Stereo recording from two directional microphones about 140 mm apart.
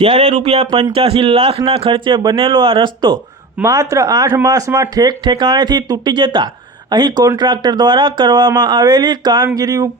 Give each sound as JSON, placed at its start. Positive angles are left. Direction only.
{"t": 0.0, "sound": "speech", "side_deg": -45}
{"t": 3.6, "sound": "speech", "side_deg": -25}